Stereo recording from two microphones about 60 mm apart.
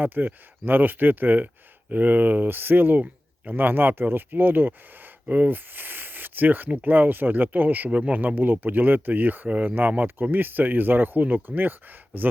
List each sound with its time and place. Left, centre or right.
0.0 s speech: right